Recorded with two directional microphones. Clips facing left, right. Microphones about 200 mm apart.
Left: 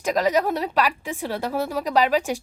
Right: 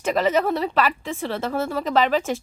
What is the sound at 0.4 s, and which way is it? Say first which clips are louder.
A woman's voice: right 1 dB; 15° left (ahead or behind).